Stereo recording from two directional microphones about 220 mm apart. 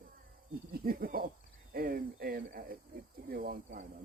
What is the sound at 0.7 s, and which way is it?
Cricket, 45° right (ahead or behind).